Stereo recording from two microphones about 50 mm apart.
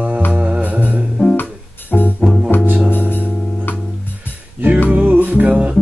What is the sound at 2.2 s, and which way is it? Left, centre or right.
Music, centre.